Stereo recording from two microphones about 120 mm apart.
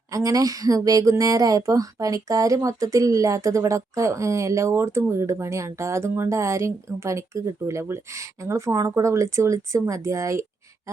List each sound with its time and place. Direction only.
0.1 s speech: 30° right (ahead or behind)